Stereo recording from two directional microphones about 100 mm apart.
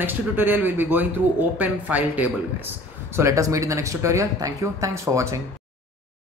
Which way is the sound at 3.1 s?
30° right (ahead or behind).